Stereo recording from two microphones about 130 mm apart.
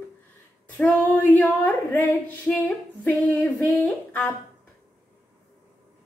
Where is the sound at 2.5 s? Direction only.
10° left (ahead or behind).